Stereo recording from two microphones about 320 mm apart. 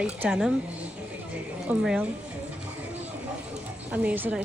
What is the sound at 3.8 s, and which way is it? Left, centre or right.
Speech, centre.